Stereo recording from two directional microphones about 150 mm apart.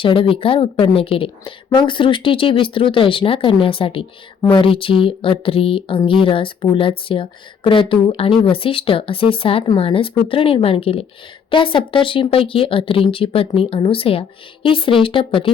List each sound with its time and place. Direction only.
0.0 s speech: 35° left (ahead or behind)